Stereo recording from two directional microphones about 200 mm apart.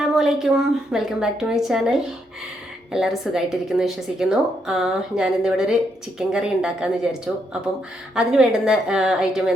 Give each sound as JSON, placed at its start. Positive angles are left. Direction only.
{"t": 0.2, "sound": "speech", "side_deg": 0}